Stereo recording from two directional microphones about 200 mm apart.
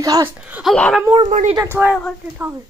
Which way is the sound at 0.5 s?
Centre (ahead or behind).